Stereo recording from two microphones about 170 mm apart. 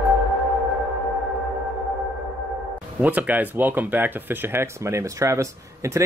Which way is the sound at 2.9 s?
10° right (ahead or behind).